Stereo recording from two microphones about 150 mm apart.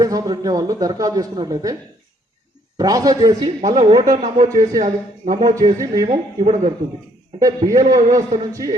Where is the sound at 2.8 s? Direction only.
25° right (ahead or behind).